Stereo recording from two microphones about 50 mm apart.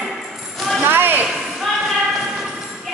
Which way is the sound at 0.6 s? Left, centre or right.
Centre.